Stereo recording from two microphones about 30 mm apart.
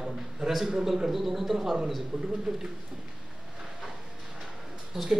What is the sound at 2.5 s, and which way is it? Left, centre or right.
Speech, right.